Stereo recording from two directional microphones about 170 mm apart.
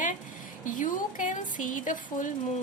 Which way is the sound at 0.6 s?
50° left (ahead or behind).